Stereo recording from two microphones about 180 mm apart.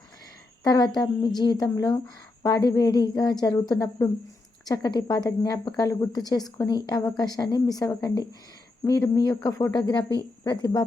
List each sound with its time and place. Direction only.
0.6 s a woman's voice: 25° left (ahead or behind)